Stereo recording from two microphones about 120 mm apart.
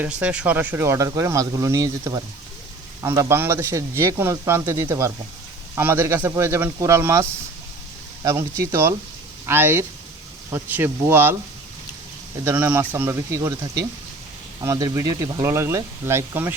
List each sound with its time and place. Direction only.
0.0 s speech: 10° right (ahead or behind)
12.5 s speech: 15° right (ahead or behind)